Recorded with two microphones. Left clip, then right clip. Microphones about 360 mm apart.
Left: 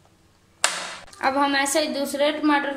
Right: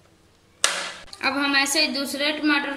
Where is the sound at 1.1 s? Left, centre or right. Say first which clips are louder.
Left 1 dB; centre.